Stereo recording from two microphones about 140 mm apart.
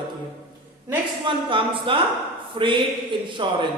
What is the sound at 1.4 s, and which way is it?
Speech, 40° right (ahead or behind).